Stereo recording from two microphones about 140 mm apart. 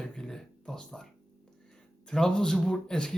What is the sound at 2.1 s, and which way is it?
Speech, 5° left (ahead or behind).